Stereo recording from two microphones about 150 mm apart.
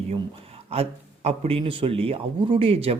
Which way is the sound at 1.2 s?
40° right (ahead or behind).